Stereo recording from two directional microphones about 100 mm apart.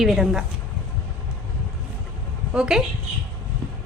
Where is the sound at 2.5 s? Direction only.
5° right (ahead or behind).